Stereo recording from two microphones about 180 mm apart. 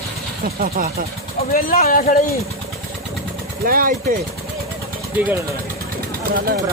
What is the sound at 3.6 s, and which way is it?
Speech, 50° right (ahead or behind).